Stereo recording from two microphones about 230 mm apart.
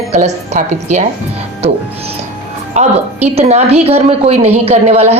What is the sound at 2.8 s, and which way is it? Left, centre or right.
A woman's voice, right.